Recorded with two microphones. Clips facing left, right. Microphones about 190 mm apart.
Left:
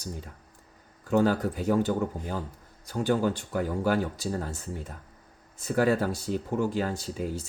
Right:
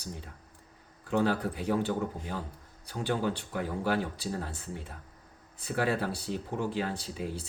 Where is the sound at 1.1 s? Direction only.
45° left (ahead or behind).